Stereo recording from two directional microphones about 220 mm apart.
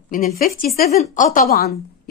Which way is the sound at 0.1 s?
40° left (ahead or behind).